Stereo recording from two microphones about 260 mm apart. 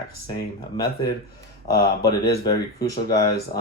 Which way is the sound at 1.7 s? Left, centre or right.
Left.